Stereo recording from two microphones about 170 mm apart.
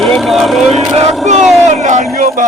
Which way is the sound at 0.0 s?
Centre (ahead or behind).